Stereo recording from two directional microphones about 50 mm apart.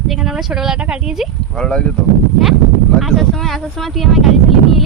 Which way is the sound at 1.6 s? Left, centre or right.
Centre.